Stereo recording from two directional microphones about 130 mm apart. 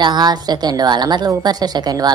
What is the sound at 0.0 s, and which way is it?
Speech, 35° right (ahead or behind).